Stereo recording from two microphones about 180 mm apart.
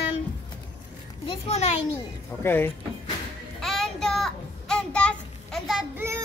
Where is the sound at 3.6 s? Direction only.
Centre (ahead or behind).